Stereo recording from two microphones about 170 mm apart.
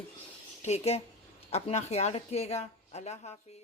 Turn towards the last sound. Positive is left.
turn(degrees=40)  # may be behind; listen again after turning